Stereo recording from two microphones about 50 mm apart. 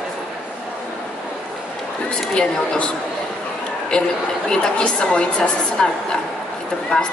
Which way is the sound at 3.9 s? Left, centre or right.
Centre.